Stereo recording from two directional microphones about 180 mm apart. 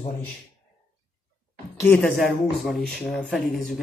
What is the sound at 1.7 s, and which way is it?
Speech, 10° left (ahead or behind).